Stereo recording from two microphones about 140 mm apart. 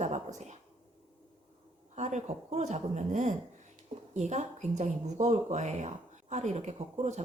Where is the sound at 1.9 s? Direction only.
55° right (ahead or behind).